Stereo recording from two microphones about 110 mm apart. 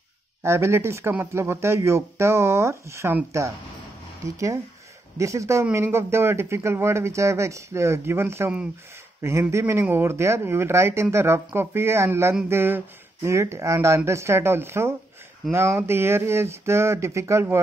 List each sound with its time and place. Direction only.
0.4 s speech: 25° right (ahead or behind)
5.1 s speech: 30° right (ahead or behind)